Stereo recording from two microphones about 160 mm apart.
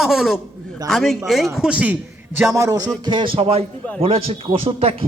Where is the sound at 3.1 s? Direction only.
30° right (ahead or behind).